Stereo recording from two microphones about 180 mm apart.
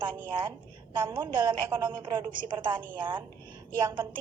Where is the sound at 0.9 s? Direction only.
25° right (ahead or behind).